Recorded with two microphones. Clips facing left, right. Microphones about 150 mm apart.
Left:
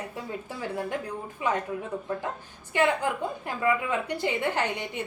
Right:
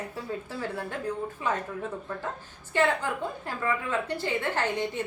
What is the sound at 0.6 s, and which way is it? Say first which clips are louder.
Speech: left 5 dB; 15° left (ahead or behind).